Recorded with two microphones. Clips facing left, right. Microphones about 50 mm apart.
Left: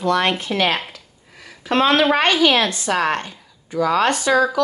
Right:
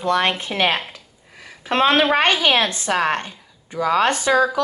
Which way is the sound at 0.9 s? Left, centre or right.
Right.